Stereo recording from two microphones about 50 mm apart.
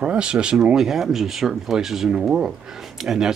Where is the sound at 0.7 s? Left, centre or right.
Centre.